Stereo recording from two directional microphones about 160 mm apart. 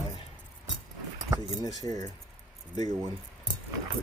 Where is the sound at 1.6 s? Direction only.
25° left (ahead or behind).